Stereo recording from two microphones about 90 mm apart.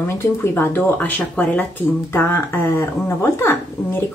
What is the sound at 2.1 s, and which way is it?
Speech, 30° left (ahead or behind).